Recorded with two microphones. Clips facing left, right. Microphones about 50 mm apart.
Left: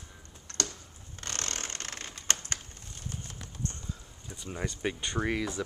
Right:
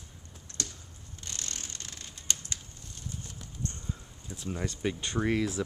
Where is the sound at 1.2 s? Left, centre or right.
Left.